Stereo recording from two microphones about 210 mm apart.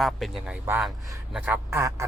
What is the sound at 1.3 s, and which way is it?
Quack, 5° right (ahead or behind).